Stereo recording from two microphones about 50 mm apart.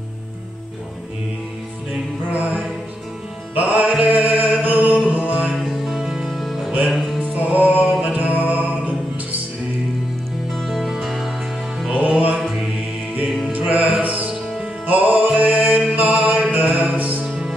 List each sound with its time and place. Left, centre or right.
2.3 s music: right
5.7 s music: centre
7.2 s music: right
10.5 s music: centre
11.9 s music: right
13.5 s music: right
17.2 s music: centre